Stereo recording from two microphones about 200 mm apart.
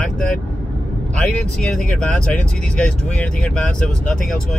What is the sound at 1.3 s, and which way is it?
Speech, 5° left (ahead or behind).